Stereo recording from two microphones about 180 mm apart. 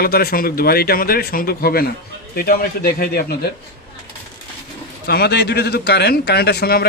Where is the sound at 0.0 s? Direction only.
60° left (ahead or behind).